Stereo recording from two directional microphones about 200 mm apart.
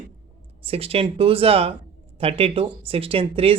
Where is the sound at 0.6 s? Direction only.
30° right (ahead or behind).